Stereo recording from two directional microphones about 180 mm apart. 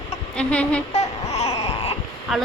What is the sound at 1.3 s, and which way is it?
Baby cry, 35° left (ahead or behind).